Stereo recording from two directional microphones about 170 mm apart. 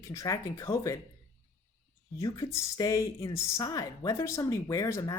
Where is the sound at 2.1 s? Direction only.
20° left (ahead or behind).